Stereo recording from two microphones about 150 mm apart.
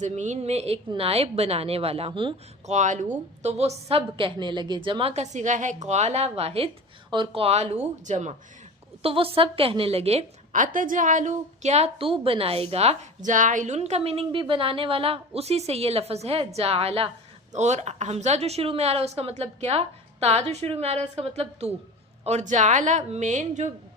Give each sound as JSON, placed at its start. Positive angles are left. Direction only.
{"t": 0.0, "sound": "a woman's voice", "side_deg": -50}
{"t": 2.6, "sound": "a woman's voice", "side_deg": -55}
{"t": 9.0, "sound": "a woman's voice", "side_deg": -40}